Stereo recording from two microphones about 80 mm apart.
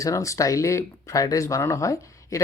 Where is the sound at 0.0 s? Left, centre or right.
Left.